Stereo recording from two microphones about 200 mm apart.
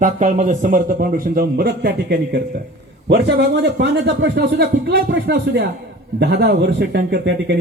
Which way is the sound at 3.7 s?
60° right (ahead or behind).